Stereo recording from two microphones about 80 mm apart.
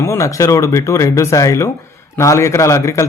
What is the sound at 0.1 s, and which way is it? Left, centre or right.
A man's voice, left.